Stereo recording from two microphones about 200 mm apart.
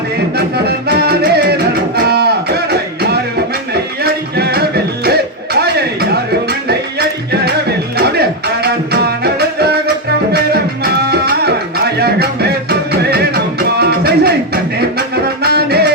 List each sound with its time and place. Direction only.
0.3 s music: 55° right (ahead or behind)
2.0 s a sound: 55° right (ahead or behind)
4.0 s music: 50° right (ahead or behind)
7.9 s music: 55° right (ahead or behind)